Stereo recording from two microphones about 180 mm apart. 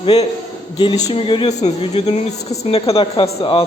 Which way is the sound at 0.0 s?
35° left (ahead or behind).